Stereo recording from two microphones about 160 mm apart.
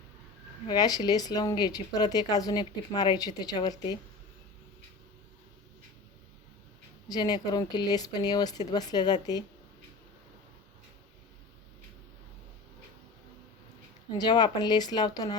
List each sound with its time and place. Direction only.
0.7 s speech: 25° left (ahead or behind)
7.1 s speech: 25° left (ahead or behind)
14.2 s speech: 25° left (ahead or behind)